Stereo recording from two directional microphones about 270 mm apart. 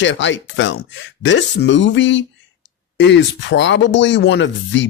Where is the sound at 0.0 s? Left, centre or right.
Left.